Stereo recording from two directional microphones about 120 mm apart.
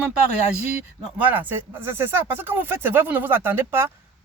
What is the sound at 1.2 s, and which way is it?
Speech, 15° right (ahead or behind).